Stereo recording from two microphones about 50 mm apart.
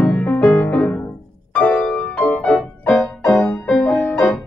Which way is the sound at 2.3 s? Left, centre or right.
Left.